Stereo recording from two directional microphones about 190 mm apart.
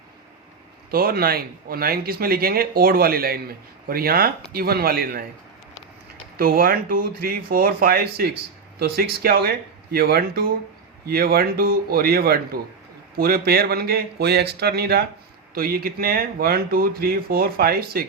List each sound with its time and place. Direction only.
0.9 s speech: 50° right (ahead or behind)
6.3 s a man's voice: 50° right (ahead or behind)